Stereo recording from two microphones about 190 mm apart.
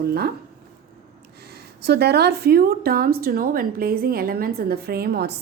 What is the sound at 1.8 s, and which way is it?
A woman's voice, 60° right (ahead or behind).